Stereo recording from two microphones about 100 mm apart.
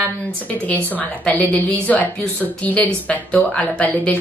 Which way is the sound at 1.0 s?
15° left (ahead or behind).